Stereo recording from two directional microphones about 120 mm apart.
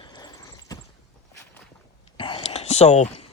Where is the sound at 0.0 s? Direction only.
35° left (ahead or behind).